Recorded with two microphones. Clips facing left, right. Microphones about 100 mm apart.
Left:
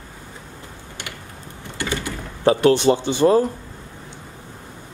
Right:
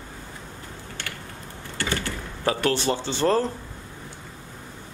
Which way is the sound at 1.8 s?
15° left (ahead or behind).